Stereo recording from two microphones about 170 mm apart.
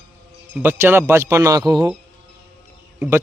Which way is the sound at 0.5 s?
10° right (ahead or behind).